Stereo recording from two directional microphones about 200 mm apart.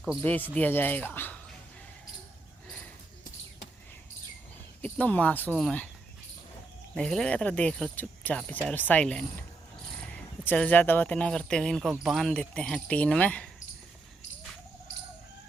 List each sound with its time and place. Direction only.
0.2 s speech: 10° left (ahead or behind)
4.8 s speech: 5° left (ahead or behind)
6.9 s speech: centre (ahead or behind)